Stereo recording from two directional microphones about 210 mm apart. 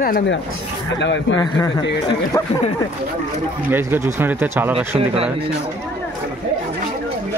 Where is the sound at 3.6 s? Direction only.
10° right (ahead or behind).